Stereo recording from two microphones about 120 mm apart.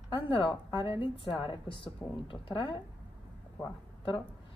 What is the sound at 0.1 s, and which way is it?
A woman's voice, 45° left (ahead or behind).